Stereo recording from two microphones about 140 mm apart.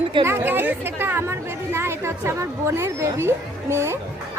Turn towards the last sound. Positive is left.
turn(degrees=-20)  # may be behind; listen again after turning